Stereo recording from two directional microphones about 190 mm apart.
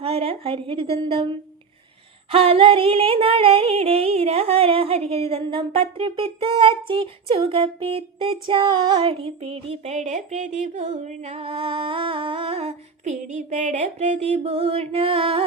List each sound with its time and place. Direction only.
0.0 s a woman's voice: 30° right (ahead or behind)
2.3 s music: 30° right (ahead or behind)